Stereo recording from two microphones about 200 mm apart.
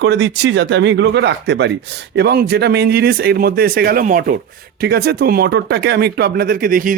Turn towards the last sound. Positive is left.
turn(degrees=-45)  # may be behind; listen again after turning